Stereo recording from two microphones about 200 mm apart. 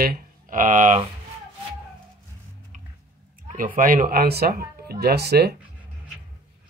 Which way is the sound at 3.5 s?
40° right (ahead or behind).